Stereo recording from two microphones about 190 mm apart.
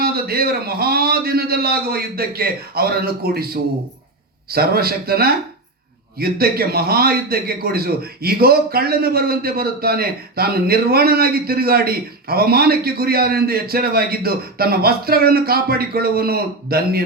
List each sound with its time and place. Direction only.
0.0 s a man's voice: 55° right (ahead or behind)